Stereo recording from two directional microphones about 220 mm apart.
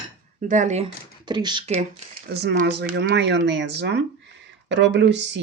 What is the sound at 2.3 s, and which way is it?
Speech, 50° right (ahead or behind).